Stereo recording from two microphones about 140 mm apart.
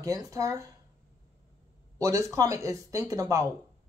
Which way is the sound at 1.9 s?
20° right (ahead or behind).